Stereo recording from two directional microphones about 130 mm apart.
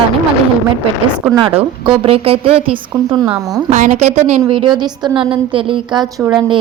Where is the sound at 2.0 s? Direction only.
45° right (ahead or behind).